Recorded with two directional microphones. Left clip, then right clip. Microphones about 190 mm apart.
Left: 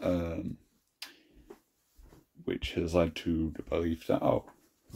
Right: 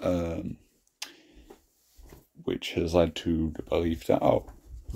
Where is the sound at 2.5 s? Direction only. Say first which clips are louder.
Right 4 dB; 20° right (ahead or behind).